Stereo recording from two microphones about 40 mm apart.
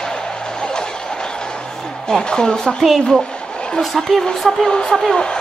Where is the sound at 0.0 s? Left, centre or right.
Centre.